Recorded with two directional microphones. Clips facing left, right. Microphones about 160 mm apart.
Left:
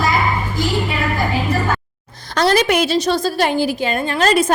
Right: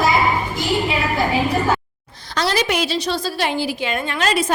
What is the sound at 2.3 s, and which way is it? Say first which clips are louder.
A woman's voice: left 5 dB; 50° left (ahead or behind).